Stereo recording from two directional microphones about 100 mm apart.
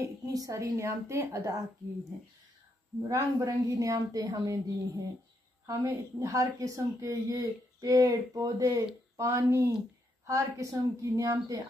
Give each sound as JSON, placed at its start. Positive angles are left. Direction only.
{"t": 0.0, "sound": "a woman's voice", "side_deg": -35}
{"t": 3.1, "sound": "a woman's voice", "side_deg": -35}